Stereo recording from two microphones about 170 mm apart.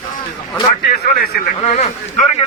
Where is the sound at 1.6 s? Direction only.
40° left (ahead or behind).